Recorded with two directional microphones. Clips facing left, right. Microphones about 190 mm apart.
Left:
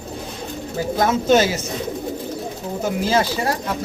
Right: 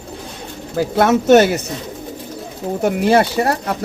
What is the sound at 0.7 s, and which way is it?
Speech, 70° right (ahead or behind).